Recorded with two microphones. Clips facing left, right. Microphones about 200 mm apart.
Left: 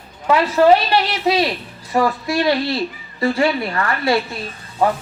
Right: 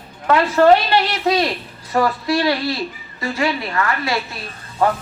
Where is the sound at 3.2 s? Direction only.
30° left (ahead or behind).